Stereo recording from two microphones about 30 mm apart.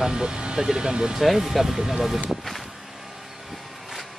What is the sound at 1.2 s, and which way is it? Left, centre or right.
Speech, centre.